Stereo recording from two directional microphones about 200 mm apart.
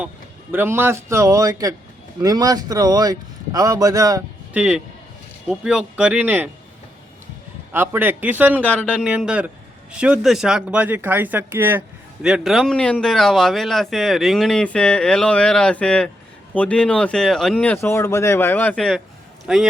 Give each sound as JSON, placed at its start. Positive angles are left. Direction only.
{"t": 0.5, "sound": "speech", "side_deg": -10}
{"t": 4.5, "sound": "speech", "side_deg": -5}
{"t": 7.7, "sound": "speech", "side_deg": -10}
{"t": 8.6, "sound": "speech", "side_deg": 5}
{"t": 8.9, "sound": "speech", "side_deg": -5}